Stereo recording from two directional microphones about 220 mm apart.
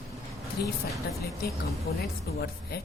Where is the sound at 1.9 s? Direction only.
45° left (ahead or behind).